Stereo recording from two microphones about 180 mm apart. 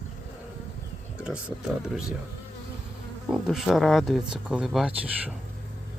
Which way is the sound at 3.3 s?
Centre (ahead or behind).